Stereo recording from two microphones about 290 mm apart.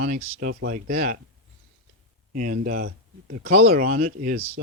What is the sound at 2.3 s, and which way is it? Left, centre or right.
Speech, right.